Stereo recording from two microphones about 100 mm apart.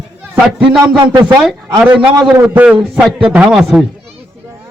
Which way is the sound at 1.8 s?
10° right (ahead or behind).